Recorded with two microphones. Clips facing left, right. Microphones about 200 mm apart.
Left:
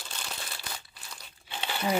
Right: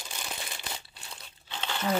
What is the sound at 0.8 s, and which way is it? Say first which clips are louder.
Crumpling: right 1 dB; 30° right (ahead or behind).